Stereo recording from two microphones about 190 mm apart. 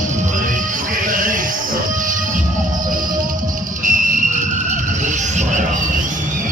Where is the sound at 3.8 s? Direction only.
40° right (ahead or behind).